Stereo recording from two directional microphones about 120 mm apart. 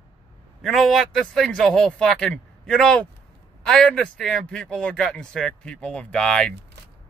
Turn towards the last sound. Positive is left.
turn(degrees=5)  # may be behind; listen again after turning